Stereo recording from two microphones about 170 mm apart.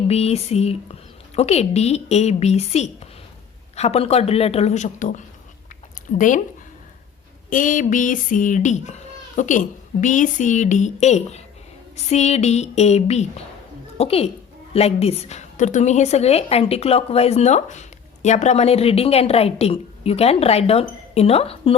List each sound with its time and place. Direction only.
0.1 s a woman's voice: 35° left (ahead or behind)
7.5 s a child's voice: 50° left (ahead or behind); by 21.8 s 35° left (ahead or behind)